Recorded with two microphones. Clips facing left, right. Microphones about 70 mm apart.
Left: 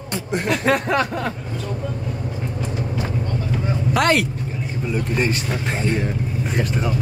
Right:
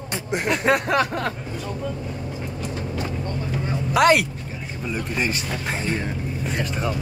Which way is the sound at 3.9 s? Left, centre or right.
Centre.